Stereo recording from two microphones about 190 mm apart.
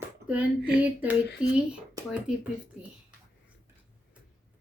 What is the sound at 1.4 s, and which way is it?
Speech, 5° right (ahead or behind).